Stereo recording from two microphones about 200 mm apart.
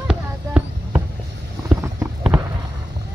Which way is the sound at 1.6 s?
15° right (ahead or behind).